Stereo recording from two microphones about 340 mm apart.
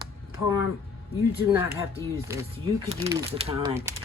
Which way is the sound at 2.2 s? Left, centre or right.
Centre.